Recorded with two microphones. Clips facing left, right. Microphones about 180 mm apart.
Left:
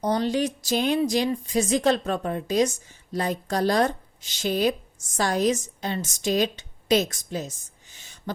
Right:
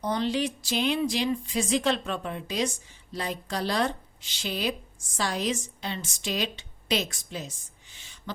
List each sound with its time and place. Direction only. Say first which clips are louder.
0.0 s speech: left 4 dB; 40° left (ahead or behind)